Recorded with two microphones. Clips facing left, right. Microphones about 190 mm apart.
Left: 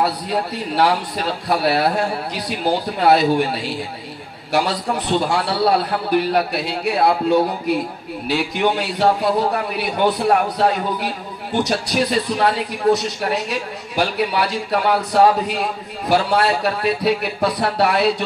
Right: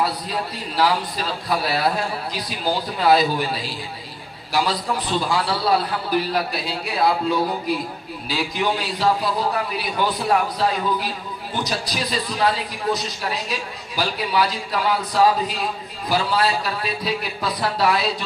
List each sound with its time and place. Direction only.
0.0 s a man's voice: 65° left (ahead or behind)